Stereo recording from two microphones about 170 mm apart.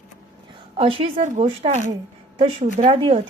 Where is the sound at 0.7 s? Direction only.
35° right (ahead or behind).